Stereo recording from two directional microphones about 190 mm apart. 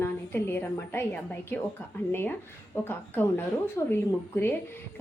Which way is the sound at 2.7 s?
10° left (ahead or behind).